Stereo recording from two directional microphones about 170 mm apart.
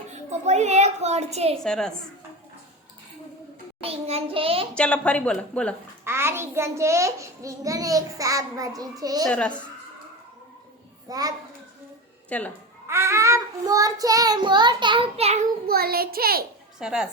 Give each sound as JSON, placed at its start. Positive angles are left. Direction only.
{"t": 0.1, "sound": "a woman's voice", "side_deg": -40}
{"t": 1.6, "sound": "a woman's voice", "side_deg": 5}
{"t": 3.8, "sound": "a woman's voice", "side_deg": -35}
{"t": 4.7, "sound": "speech", "side_deg": 5}
{"t": 6.1, "sound": "a child's voice", "side_deg": -15}
{"t": 9.2, "sound": "speech", "side_deg": 5}
{"t": 11.1, "sound": "a child's voice", "side_deg": -20}
{"t": 12.3, "sound": "speech", "side_deg": 10}
{"t": 12.9, "sound": "a child's voice", "side_deg": -15}
{"t": 15.6, "sound": "a child's voice", "side_deg": -65}
{"t": 16.8, "sound": "a woman's voice", "side_deg": -5}